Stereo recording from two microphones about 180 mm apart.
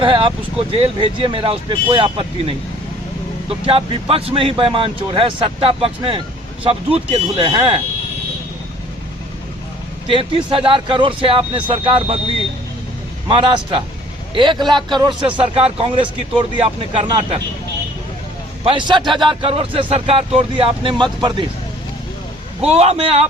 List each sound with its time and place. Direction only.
0.0 s a man's voice: 30° right (ahead or behind)
3.7 s a man's voice: 30° right (ahead or behind)
10.1 s a man's voice: 30° right (ahead or behind)
13.2 s a man's voice: 25° right (ahead or behind)
18.6 s a man's voice: 25° right (ahead or behind)
22.6 s speech: 35° right (ahead or behind)